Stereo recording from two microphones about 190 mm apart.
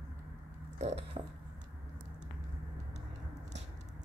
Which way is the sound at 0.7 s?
35° right (ahead or behind).